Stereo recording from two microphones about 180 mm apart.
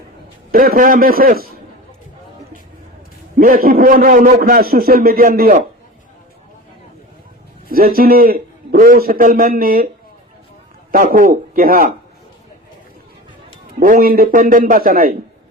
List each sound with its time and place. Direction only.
0.5 s a man's voice: 50° right (ahead or behind)
3.3 s a man's voice: 50° right (ahead or behind)
7.7 s a man's voice: 55° right (ahead or behind)
10.9 s a man's voice: 50° right (ahead or behind)
13.7 s a man's voice: 50° right (ahead or behind)